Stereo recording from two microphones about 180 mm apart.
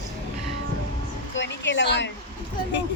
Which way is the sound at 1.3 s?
85° left.